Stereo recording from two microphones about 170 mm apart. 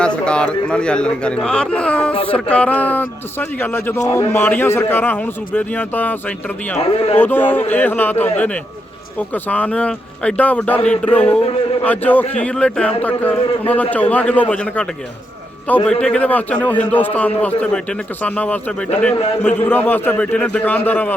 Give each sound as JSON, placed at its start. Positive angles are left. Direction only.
{"t": 0.0, "sound": "a man's voice", "side_deg": 5}
{"t": 6.7, "sound": "a man's voice", "side_deg": 35}
{"t": 7.2, "sound": "a man's voice", "side_deg": 10}
{"t": 9.3, "sound": "a man's voice", "side_deg": 10}
{"t": 15.9, "sound": "a man's voice", "side_deg": 5}